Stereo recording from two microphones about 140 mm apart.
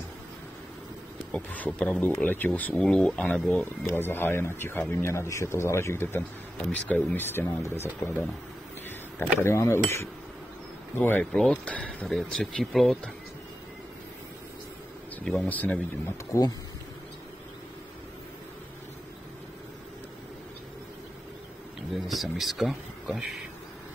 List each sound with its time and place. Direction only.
1.3 s speech: 10° left (ahead or behind)
9.4 s speech: 20° left (ahead or behind); by 13.1 s centre (ahead or behind)
15.2 s speech: 10° left (ahead or behind)
16.3 s speech: 30° left (ahead or behind)
21.9 s speech: centre (ahead or behind)